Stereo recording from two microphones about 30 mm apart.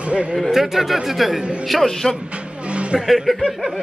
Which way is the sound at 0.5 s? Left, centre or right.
Centre.